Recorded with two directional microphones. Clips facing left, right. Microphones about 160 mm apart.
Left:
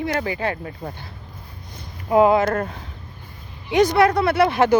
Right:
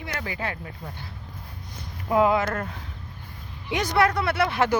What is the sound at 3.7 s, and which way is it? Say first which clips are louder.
Speech: left 7 dB; 20° left (ahead or behind).